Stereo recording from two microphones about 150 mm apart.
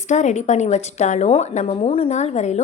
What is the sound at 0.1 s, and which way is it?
A woman's voice, 50° left (ahead or behind).